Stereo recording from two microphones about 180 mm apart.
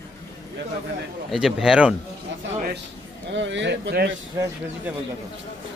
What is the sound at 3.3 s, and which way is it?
Speech, 90° right.